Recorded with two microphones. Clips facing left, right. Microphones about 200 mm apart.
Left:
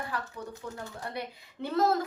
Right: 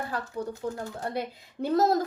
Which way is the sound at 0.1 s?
35° right (ahead or behind).